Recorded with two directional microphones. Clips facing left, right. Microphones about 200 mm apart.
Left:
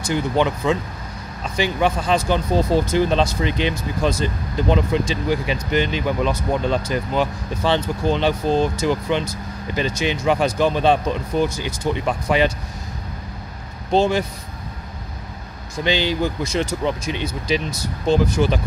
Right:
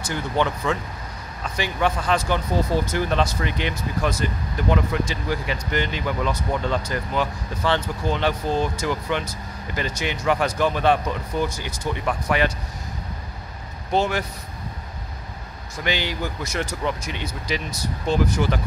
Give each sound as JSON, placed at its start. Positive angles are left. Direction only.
{"t": 0.0, "sound": "speech", "side_deg": 15}
{"t": 13.9, "sound": "speech", "side_deg": 25}
{"t": 15.7, "sound": "speech", "side_deg": 25}
{"t": 18.0, "sound": "speech", "side_deg": 20}